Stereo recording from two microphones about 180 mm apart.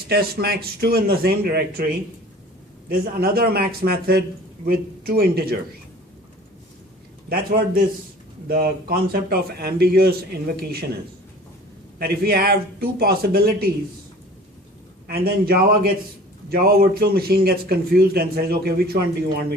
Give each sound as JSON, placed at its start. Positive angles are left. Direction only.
{"t": 0.1, "sound": "speech", "side_deg": -60}
{"t": 3.2, "sound": "speech", "side_deg": -60}
{"t": 7.3, "sound": "speech", "side_deg": -55}
{"t": 11.9, "sound": "speech", "side_deg": -60}
{"t": 15.0, "sound": "speech", "side_deg": -55}